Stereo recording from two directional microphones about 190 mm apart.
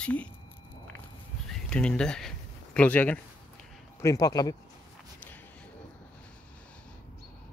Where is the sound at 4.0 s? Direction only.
20° left (ahead or behind).